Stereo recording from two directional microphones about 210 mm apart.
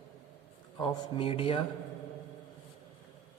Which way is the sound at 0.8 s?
25° left (ahead or behind).